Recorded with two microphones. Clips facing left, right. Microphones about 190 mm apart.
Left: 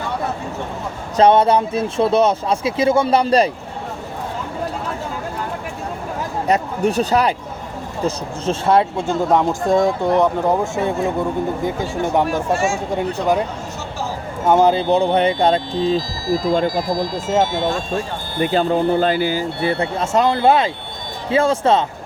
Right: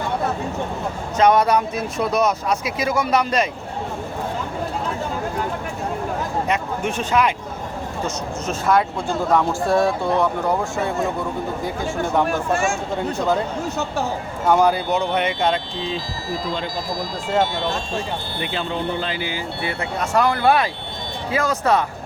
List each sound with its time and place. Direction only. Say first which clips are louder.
1.1 s speech: left 3 dB; 30° left (ahead or behind)
6.5 s speech: left 5 dB; 35° left (ahead or behind); by 12.2 s 20° left (ahead or behind)
14.4 s speech: left 3 dB; 20° left (ahead or behind)